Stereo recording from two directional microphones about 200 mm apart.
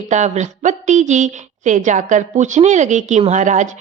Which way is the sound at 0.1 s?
35° right (ahead or behind).